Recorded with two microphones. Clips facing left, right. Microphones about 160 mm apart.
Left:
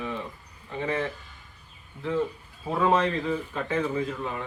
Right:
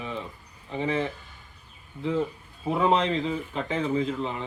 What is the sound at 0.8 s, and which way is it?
Speech, 15° right (ahead or behind).